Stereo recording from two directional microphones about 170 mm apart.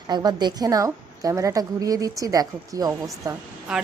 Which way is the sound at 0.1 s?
25° right (ahead or behind).